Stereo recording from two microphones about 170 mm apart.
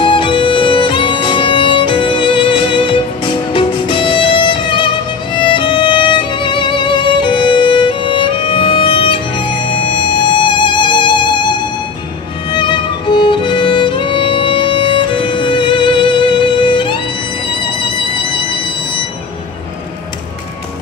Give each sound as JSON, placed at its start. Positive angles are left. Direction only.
{"t": 0.0, "sound": "music", "side_deg": 30}
{"t": 12.4, "sound": "music", "side_deg": 30}